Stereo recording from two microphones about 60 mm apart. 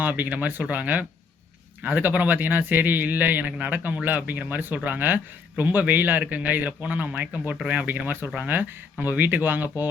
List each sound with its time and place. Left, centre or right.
0.0 s a man's voice: right